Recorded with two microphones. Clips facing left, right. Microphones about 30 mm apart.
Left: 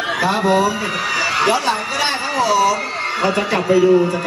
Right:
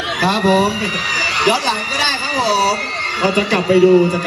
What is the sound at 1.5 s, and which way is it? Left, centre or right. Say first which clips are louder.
Speech: right 1 dB; right.